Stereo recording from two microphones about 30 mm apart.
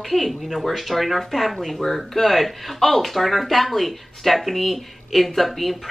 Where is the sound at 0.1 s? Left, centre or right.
Centre.